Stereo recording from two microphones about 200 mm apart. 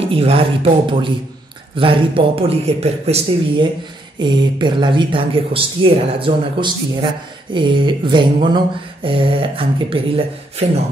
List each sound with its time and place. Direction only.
0.0 s speech: 30° right (ahead or behind)